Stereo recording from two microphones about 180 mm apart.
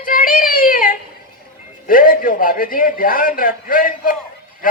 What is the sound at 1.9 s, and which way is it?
A man's voice, 50° left (ahead or behind).